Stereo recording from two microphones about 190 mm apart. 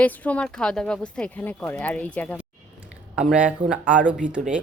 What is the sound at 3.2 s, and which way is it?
Speech, 5° right (ahead or behind).